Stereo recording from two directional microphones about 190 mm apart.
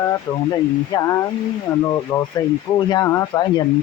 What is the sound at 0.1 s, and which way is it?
Speech, 15° left (ahead or behind).